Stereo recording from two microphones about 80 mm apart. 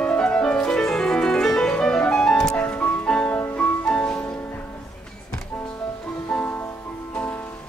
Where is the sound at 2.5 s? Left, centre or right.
Centre.